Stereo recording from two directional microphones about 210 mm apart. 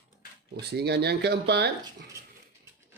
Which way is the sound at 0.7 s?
50° right (ahead or behind).